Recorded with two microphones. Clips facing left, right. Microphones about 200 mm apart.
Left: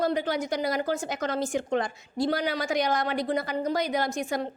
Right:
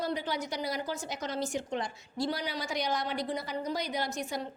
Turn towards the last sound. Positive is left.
turn(degrees=50)  # may be behind; listen again after turning